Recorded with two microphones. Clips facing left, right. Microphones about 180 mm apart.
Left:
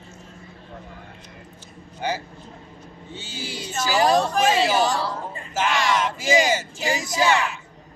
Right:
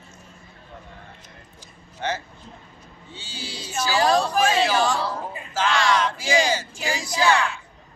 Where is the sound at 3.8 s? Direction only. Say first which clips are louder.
Left 1 dB; 10° left (ahead or behind).